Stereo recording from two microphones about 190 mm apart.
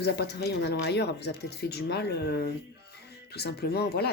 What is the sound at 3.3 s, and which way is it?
Speech, 60° left (ahead or behind).